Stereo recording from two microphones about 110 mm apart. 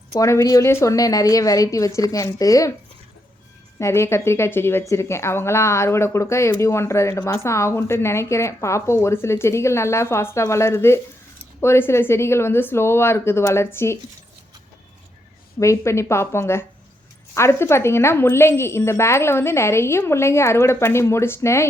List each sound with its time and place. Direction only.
0.1 s a woman's voice: 30° left (ahead or behind)
3.8 s a woman's voice: 25° left (ahead or behind)
15.5 s a woman's voice: 25° left (ahead or behind)